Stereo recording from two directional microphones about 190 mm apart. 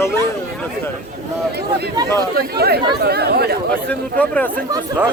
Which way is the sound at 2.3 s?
55° right (ahead or behind).